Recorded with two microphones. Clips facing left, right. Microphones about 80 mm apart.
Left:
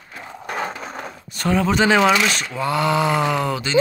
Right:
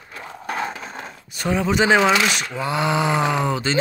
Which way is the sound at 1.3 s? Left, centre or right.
Centre.